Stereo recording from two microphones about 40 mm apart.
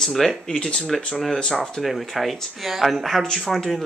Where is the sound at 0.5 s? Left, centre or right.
Left.